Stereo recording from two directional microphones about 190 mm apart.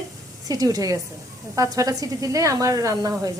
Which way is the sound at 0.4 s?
20° right (ahead or behind).